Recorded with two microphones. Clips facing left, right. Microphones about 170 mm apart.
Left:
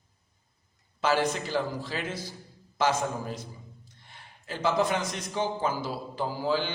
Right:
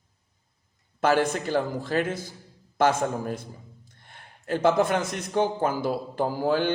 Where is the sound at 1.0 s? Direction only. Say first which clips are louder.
Right 4 dB; 55° right (ahead or behind).